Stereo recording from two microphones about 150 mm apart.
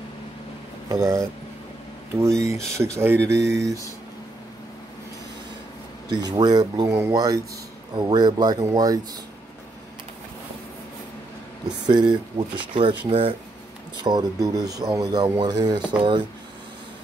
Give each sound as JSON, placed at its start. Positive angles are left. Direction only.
{"t": 0.8, "sound": "speech", "side_deg": -20}
{"t": 6.0, "sound": "speech", "side_deg": -30}
{"t": 11.8, "sound": "speech", "side_deg": -30}